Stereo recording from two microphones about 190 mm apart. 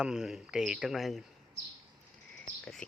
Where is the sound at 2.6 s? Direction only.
5° left (ahead or behind).